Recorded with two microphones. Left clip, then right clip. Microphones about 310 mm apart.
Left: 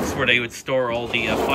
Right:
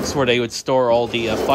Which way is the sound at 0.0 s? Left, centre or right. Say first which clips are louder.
Right 1 dB; centre.